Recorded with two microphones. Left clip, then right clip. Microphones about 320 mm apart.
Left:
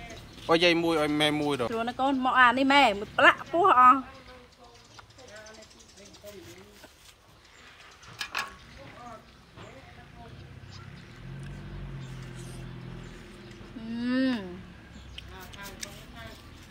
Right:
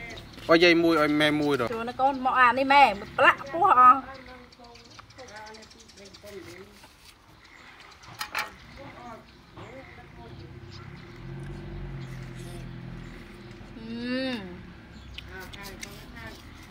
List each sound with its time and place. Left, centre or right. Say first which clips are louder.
0.5 s speech: right 4 dB; centre
1.8 s speech: right 2 dB; left
13.8 s speech: left 2 dB; centre
15.1 s a sound: right 3 dB; centre